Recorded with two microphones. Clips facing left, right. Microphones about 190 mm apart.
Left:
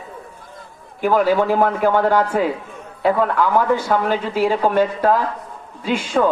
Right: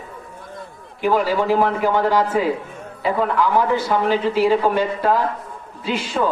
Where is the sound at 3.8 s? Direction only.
50° left (ahead or behind).